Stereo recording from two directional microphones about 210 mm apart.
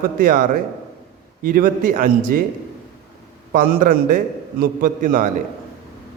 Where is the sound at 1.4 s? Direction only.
40° right (ahead or behind).